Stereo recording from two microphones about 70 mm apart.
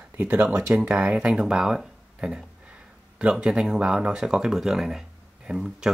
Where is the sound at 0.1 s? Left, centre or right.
Right.